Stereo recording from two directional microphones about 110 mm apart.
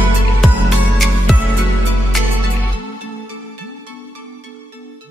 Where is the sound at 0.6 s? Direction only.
Centre (ahead or behind).